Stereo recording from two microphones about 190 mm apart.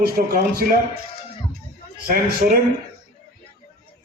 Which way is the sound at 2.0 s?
50° right (ahead or behind).